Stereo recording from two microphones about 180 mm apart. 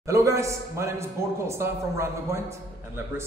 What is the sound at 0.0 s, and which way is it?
A man's voice, 15° right (ahead or behind).